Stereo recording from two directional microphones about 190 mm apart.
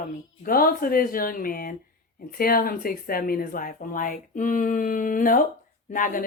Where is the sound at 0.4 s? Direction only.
50° left (ahead or behind).